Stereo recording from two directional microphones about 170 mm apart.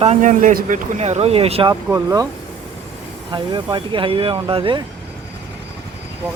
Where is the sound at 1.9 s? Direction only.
15° right (ahead or behind).